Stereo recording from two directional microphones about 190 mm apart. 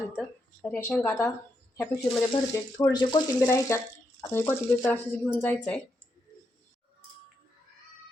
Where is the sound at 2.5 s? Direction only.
15° left (ahead or behind).